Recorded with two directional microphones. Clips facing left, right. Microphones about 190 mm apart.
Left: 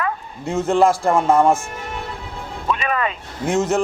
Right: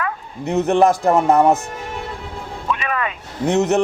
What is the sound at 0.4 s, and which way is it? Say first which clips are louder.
A man's voice: right 1 dB; 20° right (ahead or behind).